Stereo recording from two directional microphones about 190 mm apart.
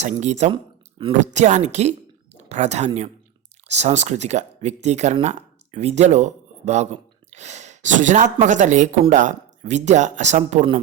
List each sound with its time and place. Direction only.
0.0 s speech: 40° right (ahead or behind)
0.5 s a sound: 25° right (ahead or behind)
1.3 s speech: 40° right (ahead or behind)